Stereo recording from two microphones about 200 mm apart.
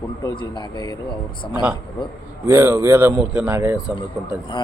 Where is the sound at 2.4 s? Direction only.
10° right (ahead or behind).